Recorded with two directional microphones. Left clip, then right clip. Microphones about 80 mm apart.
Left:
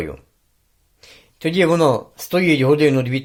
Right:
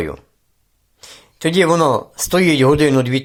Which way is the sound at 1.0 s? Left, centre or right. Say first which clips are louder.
Right 5 dB; right.